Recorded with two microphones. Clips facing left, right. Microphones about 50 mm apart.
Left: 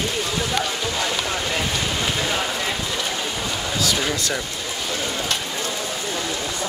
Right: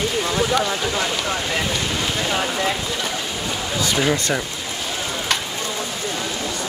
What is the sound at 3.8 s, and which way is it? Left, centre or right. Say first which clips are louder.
Speech: right 4 dB; centre.